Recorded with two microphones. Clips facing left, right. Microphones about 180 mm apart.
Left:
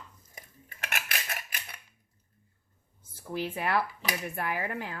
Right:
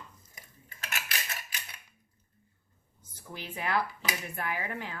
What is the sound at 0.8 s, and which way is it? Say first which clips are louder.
Cutlery: left 2 dB; 55° left (ahead or behind).